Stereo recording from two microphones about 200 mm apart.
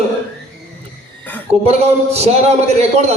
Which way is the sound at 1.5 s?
30° right (ahead or behind).